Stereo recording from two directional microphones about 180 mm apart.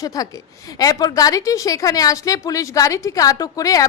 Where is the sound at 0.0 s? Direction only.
20° left (ahead or behind).